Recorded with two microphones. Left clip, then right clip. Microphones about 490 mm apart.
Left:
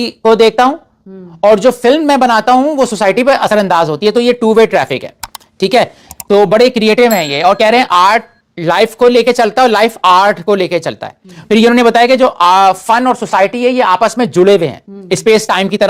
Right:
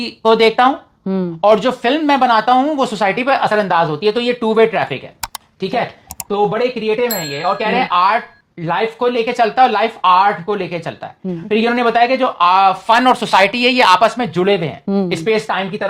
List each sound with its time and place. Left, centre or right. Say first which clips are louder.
0.0 s speech: left 4 dB; left
1.1 s speech: right 13 dB; right
1.4 s speech: left 5 dB; left
13.1 s speech: left 1 dB; centre
14.2 s speech: left 7 dB; left